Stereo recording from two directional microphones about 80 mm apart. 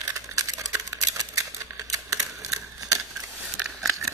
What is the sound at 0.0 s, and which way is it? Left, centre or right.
Typewriter, right.